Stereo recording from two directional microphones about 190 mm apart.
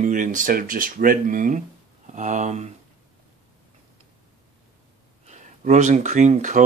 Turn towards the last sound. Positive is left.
turn(degrees=-40)  # may be behind; listen again after turning